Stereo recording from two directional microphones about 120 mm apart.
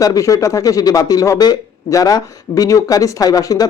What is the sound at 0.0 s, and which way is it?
Speech, 30° left (ahead or behind).